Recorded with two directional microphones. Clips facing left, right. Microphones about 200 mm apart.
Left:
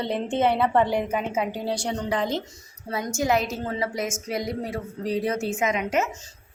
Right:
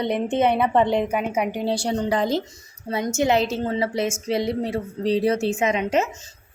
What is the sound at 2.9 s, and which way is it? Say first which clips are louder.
A woman's voice: right 3 dB; 25° right (ahead or behind).